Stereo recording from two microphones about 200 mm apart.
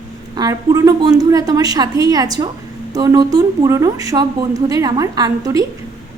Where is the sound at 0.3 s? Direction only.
15° right (ahead or behind).